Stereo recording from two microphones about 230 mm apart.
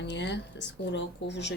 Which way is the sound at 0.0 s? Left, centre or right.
Left.